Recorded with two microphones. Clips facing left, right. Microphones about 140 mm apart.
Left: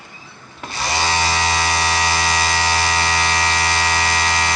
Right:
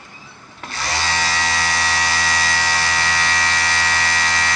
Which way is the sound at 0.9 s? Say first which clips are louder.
Left 3 dB; 15° left (ahead or behind).